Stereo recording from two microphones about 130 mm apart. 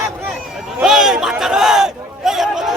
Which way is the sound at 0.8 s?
5° right (ahead or behind).